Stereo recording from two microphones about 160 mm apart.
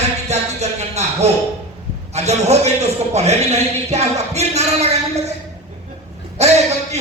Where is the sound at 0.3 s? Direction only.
45° right (ahead or behind).